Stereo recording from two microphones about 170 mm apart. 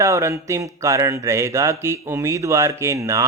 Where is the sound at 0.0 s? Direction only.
15° right (ahead or behind).